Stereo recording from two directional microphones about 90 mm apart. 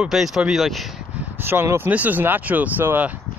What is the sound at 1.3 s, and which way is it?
Speech, 25° right (ahead or behind).